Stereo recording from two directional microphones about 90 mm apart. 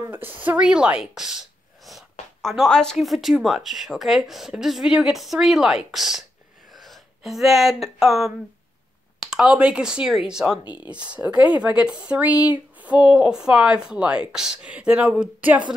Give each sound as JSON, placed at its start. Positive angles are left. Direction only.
{"t": 0.1, "sound": "speech", "side_deg": -20}
{"t": 10.6, "sound": "speech", "side_deg": 60}
{"t": 10.9, "sound": "speech", "side_deg": -15}